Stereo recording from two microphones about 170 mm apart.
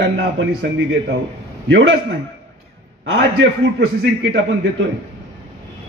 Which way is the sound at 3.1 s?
90° right.